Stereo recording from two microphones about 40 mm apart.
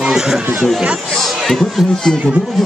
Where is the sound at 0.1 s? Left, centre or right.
Centre.